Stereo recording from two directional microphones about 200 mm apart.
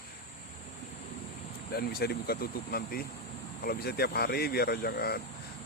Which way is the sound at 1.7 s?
50° left (ahead or behind).